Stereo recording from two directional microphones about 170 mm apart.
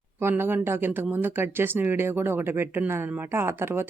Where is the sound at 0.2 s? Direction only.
15° right (ahead or behind).